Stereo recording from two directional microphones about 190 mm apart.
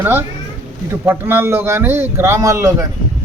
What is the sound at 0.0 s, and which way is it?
Speech, 10° right (ahead or behind).